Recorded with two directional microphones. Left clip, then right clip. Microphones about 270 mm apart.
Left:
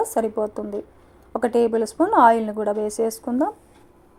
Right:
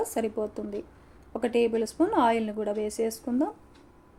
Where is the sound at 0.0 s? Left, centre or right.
Centre.